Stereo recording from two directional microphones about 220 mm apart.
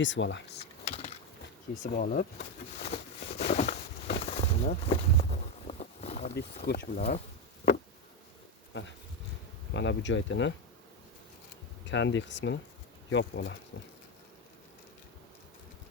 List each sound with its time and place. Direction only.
0.0 s speech: 55° left (ahead or behind)
0.9 s a sound: 30° left (ahead or behind)
4.9 s boat: 30° left (ahead or behind)
6.7 s speech: 45° left (ahead or behind)
9.7 s speech: 55° left (ahead or behind)
11.9 s speech: 55° left (ahead or behind)